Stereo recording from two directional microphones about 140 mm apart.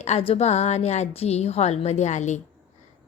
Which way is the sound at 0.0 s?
50° left (ahead or behind).